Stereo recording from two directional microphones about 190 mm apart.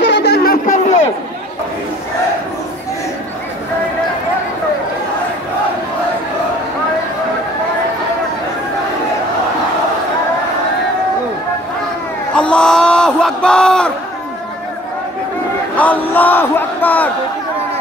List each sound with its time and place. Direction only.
0.0 s a sound: 65° left (ahead or behind); by 1.1 s 40° left (ahead or behind)
12.4 s speech: 5° left (ahead or behind)
15.7 s a man's voice: 10° left (ahead or behind)